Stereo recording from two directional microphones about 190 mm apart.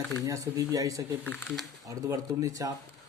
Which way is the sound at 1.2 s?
5° left (ahead or behind).